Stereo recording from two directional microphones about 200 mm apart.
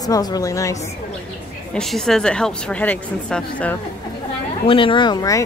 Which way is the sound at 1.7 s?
Centre (ahead or behind).